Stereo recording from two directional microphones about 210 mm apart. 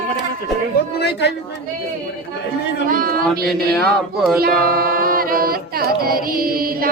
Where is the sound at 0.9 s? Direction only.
50° left (ahead or behind).